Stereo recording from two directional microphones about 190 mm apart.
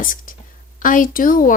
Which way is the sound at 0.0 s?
45° left (ahead or behind).